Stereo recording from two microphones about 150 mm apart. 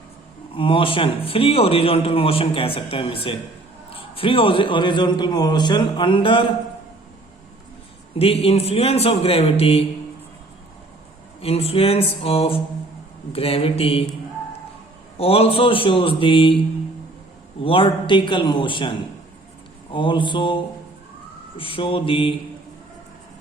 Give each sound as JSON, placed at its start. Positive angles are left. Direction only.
{"t": 0.5, "sound": "a man's voice", "side_deg": 35}
{"t": 8.2, "sound": "a man's voice", "side_deg": 40}
{"t": 11.3, "sound": "a man's voice", "side_deg": 40}
{"t": 15.2, "sound": "a man's voice", "side_deg": 40}
{"t": 21.6, "sound": "a man's voice", "side_deg": 35}